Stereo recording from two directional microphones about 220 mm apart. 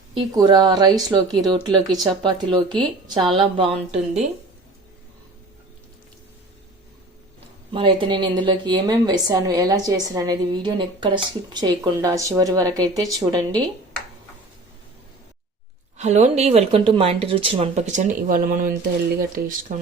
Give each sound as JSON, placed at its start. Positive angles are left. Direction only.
{"t": 0.1, "sound": "speech", "side_deg": -20}
{"t": 7.7, "sound": "a woman's voice", "side_deg": -20}
{"t": 16.0, "sound": "speech", "side_deg": -30}